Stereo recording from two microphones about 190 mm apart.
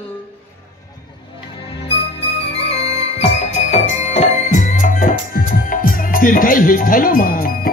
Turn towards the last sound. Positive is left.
turn(degrees=50)  # may be behind; listen again after turning